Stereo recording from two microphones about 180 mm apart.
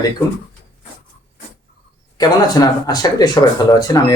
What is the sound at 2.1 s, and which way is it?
Speech, 20° left (ahead or behind).